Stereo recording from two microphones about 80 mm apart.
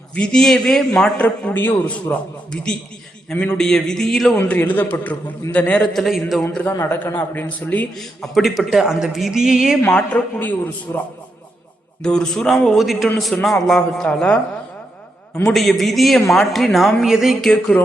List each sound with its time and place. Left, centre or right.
0.1 s a man's voice: centre
1.2 s a man's voice: left
3.3 s a man's voice: centre
4.4 s a man's voice: left
5.9 s a man's voice: centre
6.7 s a man's voice: left
7.9 s a man's voice: centre
9.8 s a man's voice: left
12.0 s a man's voice: centre
15.4 s a man's voice: centre
17.4 s a man's voice: centre